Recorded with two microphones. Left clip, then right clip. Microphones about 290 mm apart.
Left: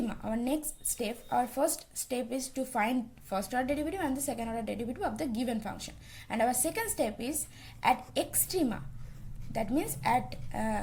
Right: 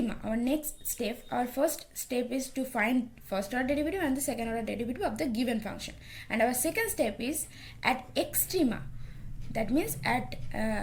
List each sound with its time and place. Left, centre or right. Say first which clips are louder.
0.1 s speech: right 2 dB; centre